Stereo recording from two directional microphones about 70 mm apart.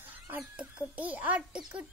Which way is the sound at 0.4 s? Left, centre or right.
Centre.